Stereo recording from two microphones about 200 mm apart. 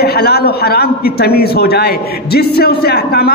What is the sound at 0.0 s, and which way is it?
A man's voice, 50° left (ahead or behind).